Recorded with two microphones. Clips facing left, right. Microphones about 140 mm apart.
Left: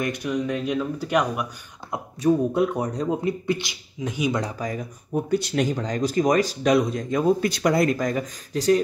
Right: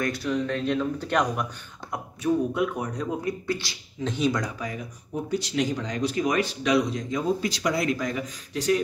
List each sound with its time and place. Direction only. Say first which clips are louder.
0.0 s speech: left 1 dB; 15° left (ahead or behind)
2.2 s speech: left 4 dB; 35° left (ahead or behind); by 4.4 s 10° left (ahead or behind)
4.4 s speech: left 3 dB; 35° left (ahead or behind)